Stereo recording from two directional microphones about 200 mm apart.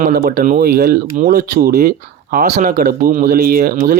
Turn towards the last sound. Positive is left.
turn(degrees=-45)  # may be behind; listen again after turning